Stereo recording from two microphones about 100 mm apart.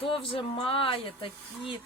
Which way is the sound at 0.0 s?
60° left (ahead or behind).